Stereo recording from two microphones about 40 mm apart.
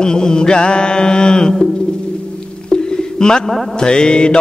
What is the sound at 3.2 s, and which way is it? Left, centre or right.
Mantra, centre.